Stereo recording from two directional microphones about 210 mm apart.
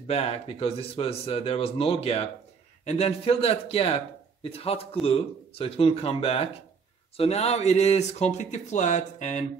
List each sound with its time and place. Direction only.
0.0 s speech: 30° left (ahead or behind)